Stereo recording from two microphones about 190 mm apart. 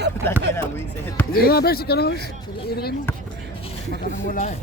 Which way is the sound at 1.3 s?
55° left (ahead or behind).